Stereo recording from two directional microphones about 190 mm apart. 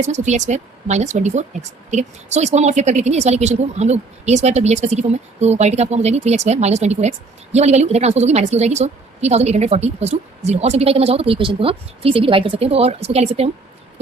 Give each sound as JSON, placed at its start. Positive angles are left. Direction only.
{"t": 0.0, "sound": "a woman's voice", "side_deg": -40}